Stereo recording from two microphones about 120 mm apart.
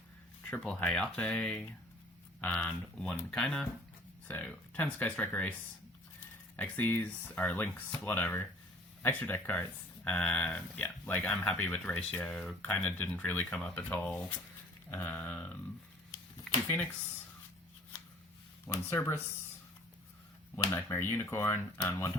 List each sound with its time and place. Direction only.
0.5 s speech: 10° left (ahead or behind)
16.5 s a sound: centre (ahead or behind)
18.7 s speech: 20° left (ahead or behind)
20.7 s speech: 15° left (ahead or behind)